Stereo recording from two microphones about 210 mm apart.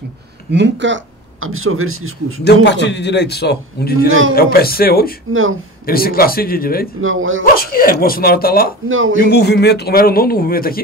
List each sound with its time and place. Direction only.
0.5 s speech: 55° right (ahead or behind); by 2.4 s 80° right
2.4 s a man's voice: 55° left (ahead or behind)
5.3 s speech: 70° right (ahead or behind)
5.9 s a man's voice: 45° left (ahead or behind)
7.0 s speech: 70° right (ahead or behind)
7.5 s a man's voice: 45° left (ahead or behind)
8.8 s speech: 70° right (ahead or behind)
9.2 s a man's voice: 50° left (ahead or behind)